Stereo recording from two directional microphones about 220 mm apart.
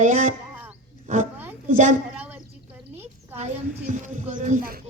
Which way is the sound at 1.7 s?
35° right (ahead or behind).